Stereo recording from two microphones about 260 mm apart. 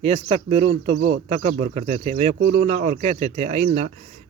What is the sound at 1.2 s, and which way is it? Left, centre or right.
Speech, right.